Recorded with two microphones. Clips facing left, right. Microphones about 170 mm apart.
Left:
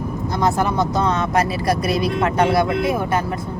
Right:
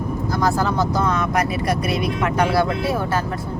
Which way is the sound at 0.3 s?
20° left (ahead or behind).